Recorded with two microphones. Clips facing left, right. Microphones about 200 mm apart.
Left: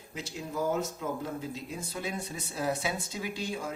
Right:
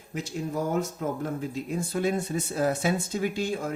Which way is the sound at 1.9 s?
50° right (ahead or behind).